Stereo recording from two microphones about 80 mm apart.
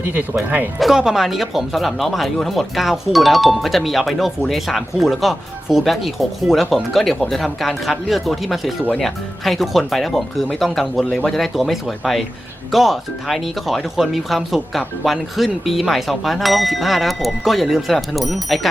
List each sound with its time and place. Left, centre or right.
0.0 s speech: right
0.8 s speech: centre